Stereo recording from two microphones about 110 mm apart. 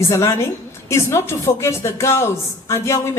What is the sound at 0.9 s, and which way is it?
A woman's voice, 25° left (ahead or behind).